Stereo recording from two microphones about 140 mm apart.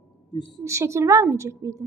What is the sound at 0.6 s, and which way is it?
A woman's voice, 20° right (ahead or behind).